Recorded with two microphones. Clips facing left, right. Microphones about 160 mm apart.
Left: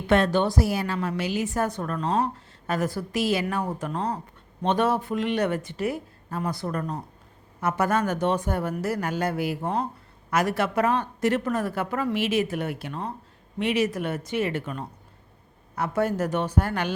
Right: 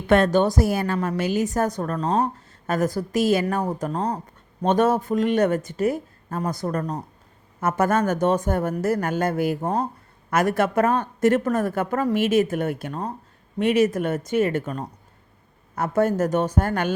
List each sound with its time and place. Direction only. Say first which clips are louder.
0.1 s a woman's voice: right 3 dB; 45° right (ahead or behind)